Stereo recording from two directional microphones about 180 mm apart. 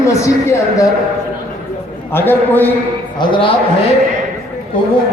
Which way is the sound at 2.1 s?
10° left (ahead or behind).